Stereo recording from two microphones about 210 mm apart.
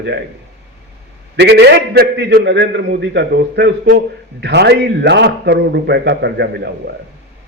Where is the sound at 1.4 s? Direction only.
50° right (ahead or behind).